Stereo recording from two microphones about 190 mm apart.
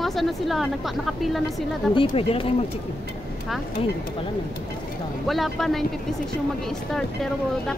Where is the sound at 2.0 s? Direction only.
30° left (ahead or behind).